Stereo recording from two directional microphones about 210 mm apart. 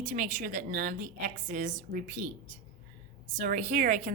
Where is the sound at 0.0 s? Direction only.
35° right (ahead or behind).